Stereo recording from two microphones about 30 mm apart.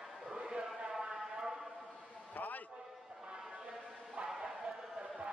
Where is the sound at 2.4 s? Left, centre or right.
Left.